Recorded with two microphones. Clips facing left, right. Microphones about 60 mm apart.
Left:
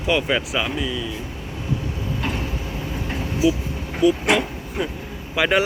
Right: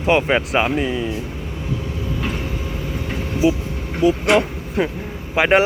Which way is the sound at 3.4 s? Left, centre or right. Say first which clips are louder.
Right 2 dB; right.